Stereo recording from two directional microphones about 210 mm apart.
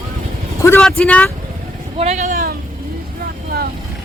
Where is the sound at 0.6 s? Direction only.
5° left (ahead or behind).